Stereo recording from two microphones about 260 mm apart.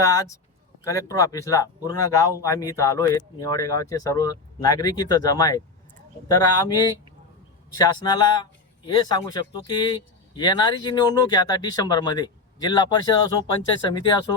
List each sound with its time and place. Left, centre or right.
0.0 s speech: centre
7.8 s speech: centre